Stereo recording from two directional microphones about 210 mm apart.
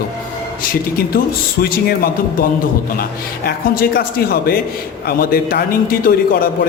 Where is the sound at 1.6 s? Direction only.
45° left (ahead or behind).